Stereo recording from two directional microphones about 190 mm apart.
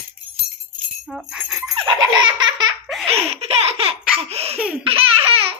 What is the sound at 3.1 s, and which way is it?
Laughter, 35° right (ahead or behind).